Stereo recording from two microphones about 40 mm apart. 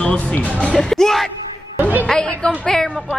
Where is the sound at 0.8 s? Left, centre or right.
Centre.